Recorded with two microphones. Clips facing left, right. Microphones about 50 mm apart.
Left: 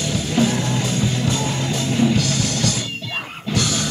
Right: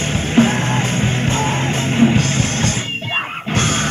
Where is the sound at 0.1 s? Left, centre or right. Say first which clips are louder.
Right 5 dB; right.